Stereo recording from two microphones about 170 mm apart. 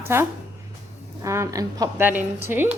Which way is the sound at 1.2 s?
15° right (ahead or behind).